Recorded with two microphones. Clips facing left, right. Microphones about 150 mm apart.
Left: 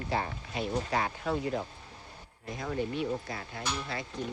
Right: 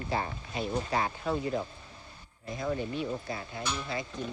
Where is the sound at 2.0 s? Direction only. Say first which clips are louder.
Left 2 dB; 70° left (ahead or behind).